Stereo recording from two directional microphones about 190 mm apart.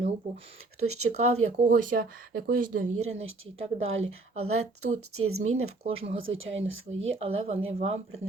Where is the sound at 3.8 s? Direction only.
90° right.